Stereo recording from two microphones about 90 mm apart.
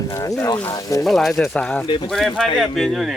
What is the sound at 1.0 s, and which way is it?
Speech, centre (ahead or behind).